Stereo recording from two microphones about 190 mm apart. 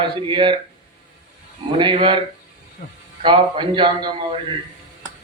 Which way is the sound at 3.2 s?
25° right (ahead or behind).